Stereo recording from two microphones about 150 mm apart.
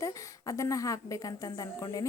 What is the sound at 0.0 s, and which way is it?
A woman's voice, 20° left (ahead or behind).